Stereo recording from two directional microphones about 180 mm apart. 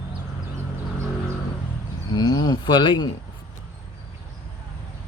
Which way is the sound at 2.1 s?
20° left (ahead or behind).